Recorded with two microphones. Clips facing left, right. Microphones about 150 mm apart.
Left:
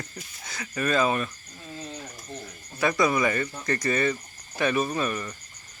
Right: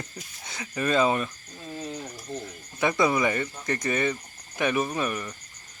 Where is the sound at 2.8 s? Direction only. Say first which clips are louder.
Even; 20° right (ahead or behind).